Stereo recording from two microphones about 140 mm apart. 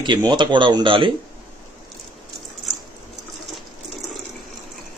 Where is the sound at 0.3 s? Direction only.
35° right (ahead or behind).